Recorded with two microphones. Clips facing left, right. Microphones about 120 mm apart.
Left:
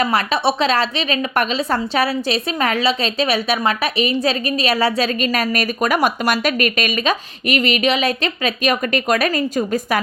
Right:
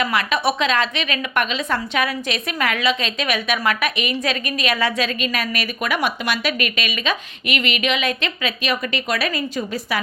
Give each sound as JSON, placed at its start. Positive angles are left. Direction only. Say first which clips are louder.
{"t": 0.0, "sound": "a woman's voice", "louder": "left 3 dB", "side_deg": 35}